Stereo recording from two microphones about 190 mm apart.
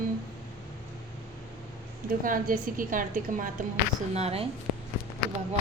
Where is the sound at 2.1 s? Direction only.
45° right (ahead or behind).